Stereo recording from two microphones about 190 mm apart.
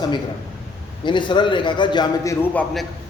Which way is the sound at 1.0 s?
25° left (ahead or behind).